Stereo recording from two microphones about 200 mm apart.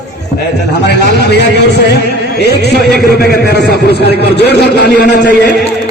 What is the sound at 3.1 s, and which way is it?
A man's voice, 50° left (ahead or behind).